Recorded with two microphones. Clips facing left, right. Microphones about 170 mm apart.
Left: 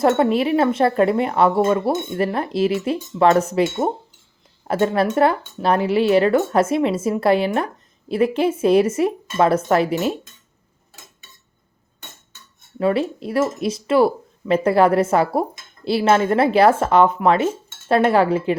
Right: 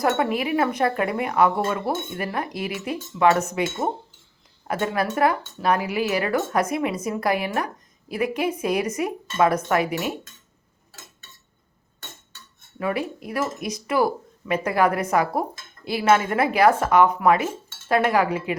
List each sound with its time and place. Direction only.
0.0 s speech: 30° left (ahead or behind)
4.7 s speech: 30° left (ahead or behind)
12.8 s speech: 30° left (ahead or behind)